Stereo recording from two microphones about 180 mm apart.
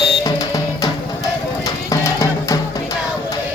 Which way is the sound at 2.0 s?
15° left (ahead or behind).